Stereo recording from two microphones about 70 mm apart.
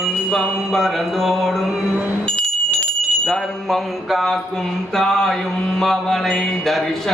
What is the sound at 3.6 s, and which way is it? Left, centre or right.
Speech, centre.